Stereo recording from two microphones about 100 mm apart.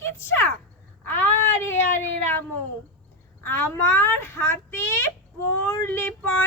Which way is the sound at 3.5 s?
25° left (ahead or behind).